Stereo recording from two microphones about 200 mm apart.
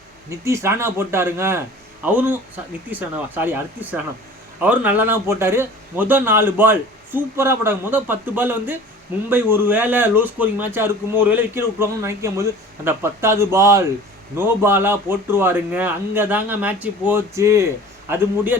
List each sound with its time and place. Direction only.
0.3 s speech: 15° right (ahead or behind)